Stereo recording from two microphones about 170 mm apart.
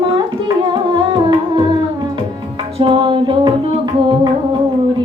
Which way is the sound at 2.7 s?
30° right (ahead or behind).